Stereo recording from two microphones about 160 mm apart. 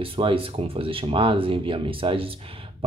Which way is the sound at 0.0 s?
35° right (ahead or behind).